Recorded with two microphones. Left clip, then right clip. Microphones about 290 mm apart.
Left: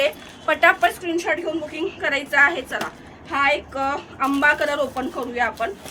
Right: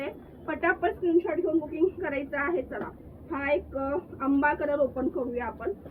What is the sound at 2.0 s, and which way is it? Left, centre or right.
A woman's voice, left.